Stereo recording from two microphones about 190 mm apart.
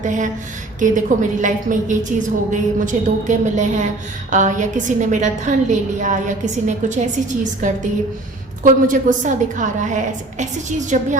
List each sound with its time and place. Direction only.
0.0 s a woman's voice: 40° right (ahead or behind)